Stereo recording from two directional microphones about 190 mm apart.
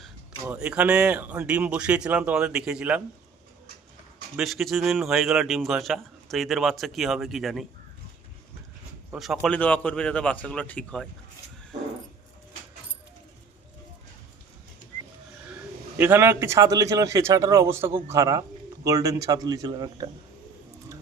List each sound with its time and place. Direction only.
0.4 s speech: 5° right (ahead or behind)
4.4 s speech: centre (ahead or behind)
9.1 s speech: centre (ahead or behind)
16.0 s speech: 10° right (ahead or behind)